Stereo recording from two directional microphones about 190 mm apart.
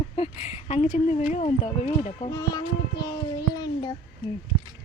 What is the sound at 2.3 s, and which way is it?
A child's voice, 20° left (ahead or behind).